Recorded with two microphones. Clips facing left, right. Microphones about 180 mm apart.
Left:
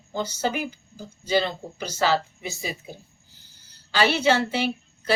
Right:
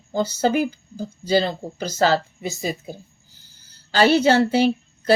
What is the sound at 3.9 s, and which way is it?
A woman's voice, 40° right (ahead or behind).